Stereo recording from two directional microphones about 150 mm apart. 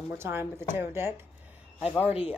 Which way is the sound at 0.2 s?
15° right (ahead or behind).